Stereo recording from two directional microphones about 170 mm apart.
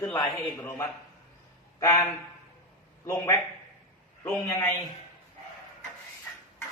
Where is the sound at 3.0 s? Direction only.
15° left (ahead or behind).